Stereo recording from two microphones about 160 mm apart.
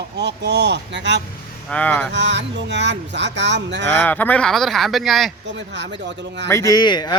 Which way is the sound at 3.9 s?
10° left (ahead or behind).